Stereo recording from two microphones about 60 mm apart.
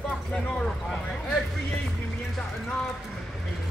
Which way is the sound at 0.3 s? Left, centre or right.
Centre.